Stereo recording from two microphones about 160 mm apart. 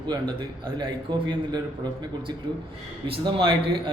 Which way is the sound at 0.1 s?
30° right (ahead or behind).